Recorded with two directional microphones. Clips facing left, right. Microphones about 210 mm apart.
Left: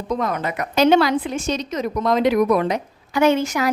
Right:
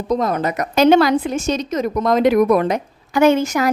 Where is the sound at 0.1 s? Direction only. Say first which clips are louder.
Right 4 dB; 35° right (ahead or behind).